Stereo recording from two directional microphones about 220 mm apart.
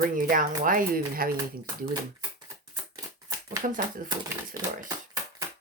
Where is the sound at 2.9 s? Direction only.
20° right (ahead or behind).